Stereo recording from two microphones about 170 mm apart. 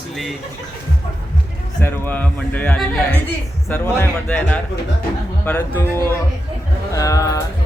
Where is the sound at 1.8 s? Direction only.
10° left (ahead or behind).